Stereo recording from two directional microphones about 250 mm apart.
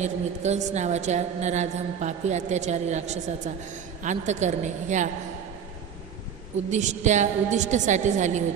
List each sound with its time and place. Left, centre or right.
0.0 s a woman's voice: right
6.7 s a woman's voice: right